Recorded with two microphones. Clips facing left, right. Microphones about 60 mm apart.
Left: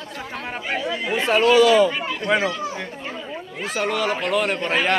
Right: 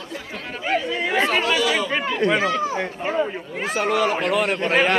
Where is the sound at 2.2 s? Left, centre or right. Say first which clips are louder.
Even; centre.